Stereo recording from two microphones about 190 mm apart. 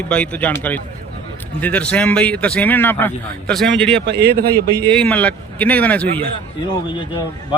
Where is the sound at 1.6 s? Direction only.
5° left (ahead or behind).